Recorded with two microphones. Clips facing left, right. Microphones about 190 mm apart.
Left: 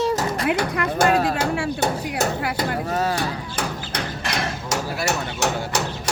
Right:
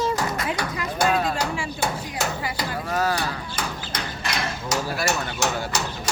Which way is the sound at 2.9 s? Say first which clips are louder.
Right 2 dB; 25° left (ahead or behind).